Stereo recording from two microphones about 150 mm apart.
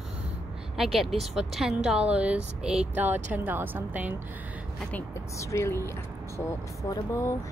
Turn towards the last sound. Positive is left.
turn(degrees=20)  # may be behind; listen again after turning